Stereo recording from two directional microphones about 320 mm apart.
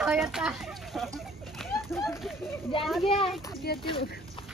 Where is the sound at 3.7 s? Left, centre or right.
Left.